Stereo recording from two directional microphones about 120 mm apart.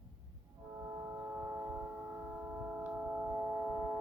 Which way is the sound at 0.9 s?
30° right (ahead or behind).